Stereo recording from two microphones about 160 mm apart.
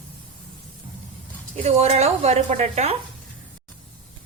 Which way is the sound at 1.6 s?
40° right (ahead or behind).